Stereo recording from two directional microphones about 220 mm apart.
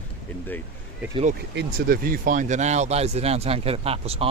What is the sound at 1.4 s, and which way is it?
Speech, 45° right (ahead or behind).